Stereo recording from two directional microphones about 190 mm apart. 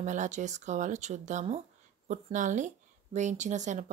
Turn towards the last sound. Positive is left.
turn(degrees=-40)  # may be behind; listen again after turning